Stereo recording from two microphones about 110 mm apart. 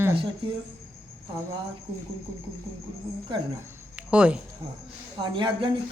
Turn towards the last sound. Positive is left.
turn(degrees=-50)  # may be behind; listen again after turning